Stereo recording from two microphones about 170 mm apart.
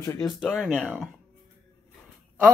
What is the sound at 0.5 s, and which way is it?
Speech, 5° left (ahead or behind).